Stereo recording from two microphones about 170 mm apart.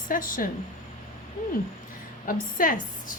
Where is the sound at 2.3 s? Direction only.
55° left (ahead or behind).